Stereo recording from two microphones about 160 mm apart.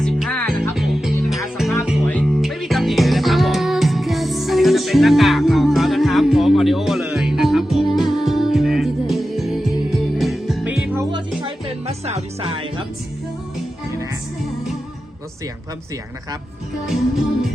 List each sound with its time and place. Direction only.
0.0 s music: 5° left (ahead or behind)
11.0 s music: 30° right (ahead or behind)